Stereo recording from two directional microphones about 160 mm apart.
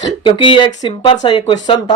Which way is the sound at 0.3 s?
30° left (ahead or behind).